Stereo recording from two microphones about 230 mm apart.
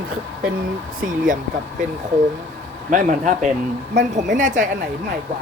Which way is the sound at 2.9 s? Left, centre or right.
Right.